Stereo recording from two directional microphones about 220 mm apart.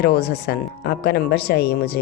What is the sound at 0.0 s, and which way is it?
Speech, 45° left (ahead or behind).